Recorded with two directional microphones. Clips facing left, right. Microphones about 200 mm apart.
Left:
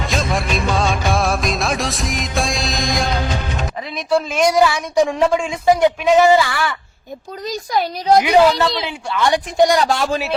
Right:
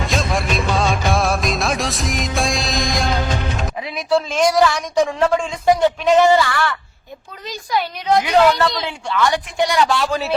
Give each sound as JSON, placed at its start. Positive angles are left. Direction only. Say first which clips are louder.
{"t": 0.0, "sound": "music", "louder": "even", "side_deg": 0}
{"t": 4.3, "sound": "speech", "louder": "left 2 dB", "side_deg": 10}
{"t": 7.4, "sound": "a woman's voice", "louder": "left 2 dB", "side_deg": 40}
{"t": 8.2, "sound": "speech", "louder": "right 1 dB", "side_deg": 10}
{"t": 9.1, "sound": "speech", "louder": "left 1 dB", "side_deg": 20}
{"t": 9.6, "sound": "speech", "louder": "left 3 dB", "side_deg": 40}